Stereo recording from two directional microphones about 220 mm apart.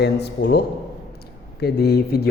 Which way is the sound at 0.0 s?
50° left (ahead or behind).